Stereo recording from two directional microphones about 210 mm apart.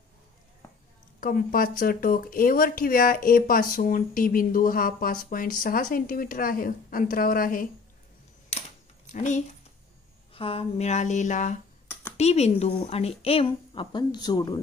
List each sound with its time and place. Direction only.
1.2 s speech: 45° left (ahead or behind)
9.0 s speech: 35° left (ahead or behind)
10.3 s a sound: 25° left (ahead or behind)
13.2 s a woman's voice: 25° left (ahead or behind)